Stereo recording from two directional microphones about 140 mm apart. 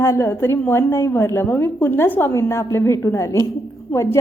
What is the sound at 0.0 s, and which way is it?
A woman's voice, 20° left (ahead or behind).